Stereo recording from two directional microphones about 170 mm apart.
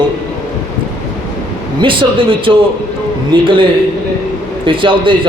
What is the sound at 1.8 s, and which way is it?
A man's voice, 30° right (ahead or behind).